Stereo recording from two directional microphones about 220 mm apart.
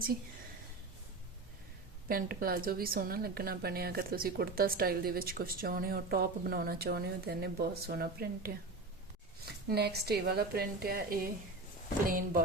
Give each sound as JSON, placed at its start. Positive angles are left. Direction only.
{"t": 2.0, "sound": "a woman's voice", "side_deg": -40}
{"t": 9.7, "sound": "a woman's voice", "side_deg": -50}